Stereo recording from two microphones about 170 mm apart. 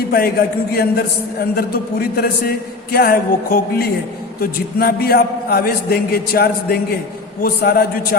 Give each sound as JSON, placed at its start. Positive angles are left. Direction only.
{"t": 0.1, "sound": "a man's voice", "side_deg": 65}